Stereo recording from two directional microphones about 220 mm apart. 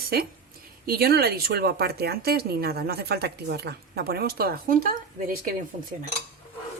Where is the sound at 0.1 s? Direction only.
45° right (ahead or behind).